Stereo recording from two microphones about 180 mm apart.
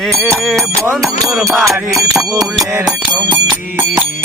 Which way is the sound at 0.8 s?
15° right (ahead or behind).